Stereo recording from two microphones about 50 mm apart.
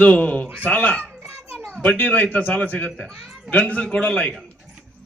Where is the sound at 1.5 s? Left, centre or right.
Left.